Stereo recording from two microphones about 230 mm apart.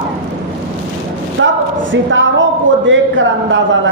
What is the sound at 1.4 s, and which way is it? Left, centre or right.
A man's voice, right.